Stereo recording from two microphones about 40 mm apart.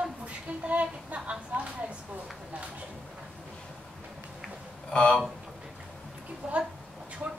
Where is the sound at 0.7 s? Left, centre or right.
Right.